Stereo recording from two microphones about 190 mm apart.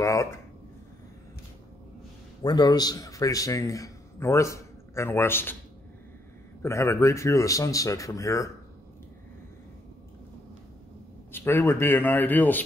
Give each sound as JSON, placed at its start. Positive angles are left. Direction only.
{"t": 0.0, "sound": "a sound", "side_deg": 15}
{"t": 2.4, "sound": "a man's voice", "side_deg": 20}
{"t": 6.6, "sound": "speech", "side_deg": 15}
{"t": 11.3, "sound": "speech", "side_deg": 10}